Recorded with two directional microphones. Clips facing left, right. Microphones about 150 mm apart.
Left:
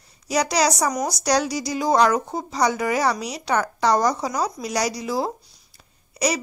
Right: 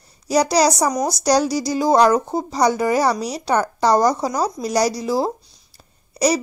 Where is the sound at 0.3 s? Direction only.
35° right (ahead or behind).